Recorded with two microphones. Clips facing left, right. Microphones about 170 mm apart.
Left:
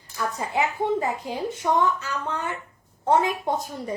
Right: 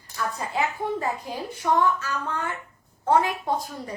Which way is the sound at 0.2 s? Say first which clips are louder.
Left 2 dB; 20° left (ahead or behind).